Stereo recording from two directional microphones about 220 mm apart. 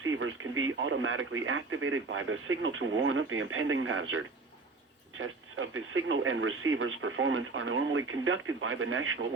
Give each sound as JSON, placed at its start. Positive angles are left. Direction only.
{"t": 0.0, "sound": "speech", "side_deg": -65}